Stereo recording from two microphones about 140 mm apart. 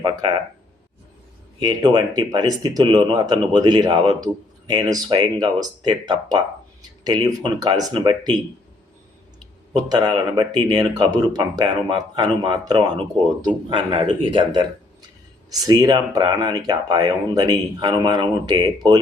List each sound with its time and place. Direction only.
0.0 s speech: 30° right (ahead or behind)
1.5 s speech: 30° right (ahead or behind)
10.3 s speech: 30° right (ahead or behind)